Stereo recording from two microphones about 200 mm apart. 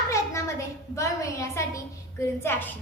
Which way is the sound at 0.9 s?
15° left (ahead or behind).